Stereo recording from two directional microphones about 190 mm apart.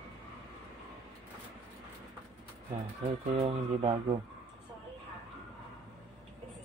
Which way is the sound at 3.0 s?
30° right (ahead or behind).